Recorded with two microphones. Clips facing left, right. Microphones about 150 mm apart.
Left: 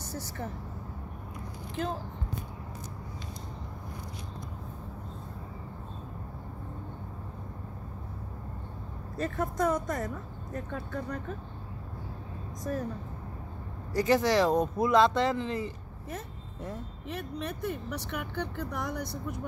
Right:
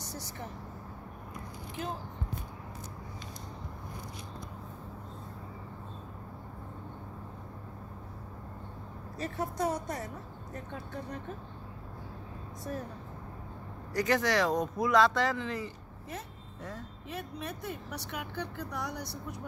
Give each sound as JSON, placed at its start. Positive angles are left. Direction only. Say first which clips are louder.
{"t": 9.1, "sound": "speech", "louder": "left 4 dB", "side_deg": 50}
{"t": 13.9, "sound": "speech", "louder": "left 4 dB", "side_deg": 25}
{"t": 17.1, "sound": "speech", "louder": "left 3 dB", "side_deg": 60}